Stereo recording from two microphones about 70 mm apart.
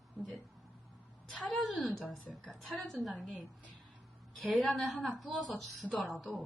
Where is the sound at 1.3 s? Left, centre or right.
Centre.